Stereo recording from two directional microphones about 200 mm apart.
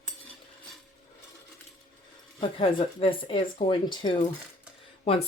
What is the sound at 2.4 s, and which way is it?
Speech, 25° left (ahead or behind).